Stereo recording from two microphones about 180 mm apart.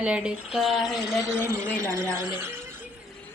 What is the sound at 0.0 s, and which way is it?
Speech, 5° right (ahead or behind).